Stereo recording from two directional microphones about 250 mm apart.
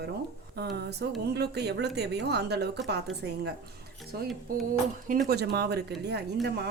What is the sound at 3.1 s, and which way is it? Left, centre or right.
Speech, centre.